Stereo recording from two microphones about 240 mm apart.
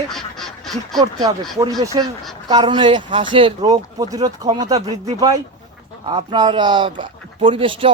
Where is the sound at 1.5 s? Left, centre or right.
Centre.